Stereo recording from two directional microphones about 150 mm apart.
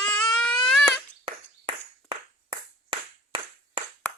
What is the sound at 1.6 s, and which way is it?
Clapping, 35° right (ahead or behind).